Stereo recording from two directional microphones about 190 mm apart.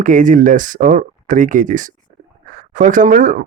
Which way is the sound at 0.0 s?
45° right (ahead or behind).